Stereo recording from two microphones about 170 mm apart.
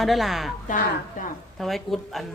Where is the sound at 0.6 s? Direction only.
50° left (ahead or behind).